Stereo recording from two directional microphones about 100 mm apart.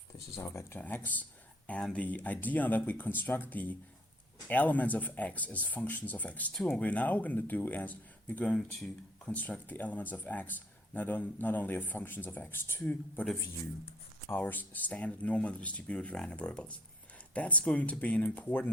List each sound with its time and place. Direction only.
0.3 s speech: 25° left (ahead or behind)
14.3 s speech: 20° left (ahead or behind)